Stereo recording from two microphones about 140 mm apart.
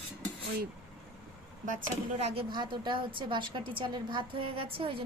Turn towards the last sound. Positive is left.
turn(degrees=-40)  # may be behind; listen again after turning